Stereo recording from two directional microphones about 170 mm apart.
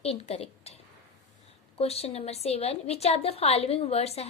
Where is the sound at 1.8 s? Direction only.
35° left (ahead or behind).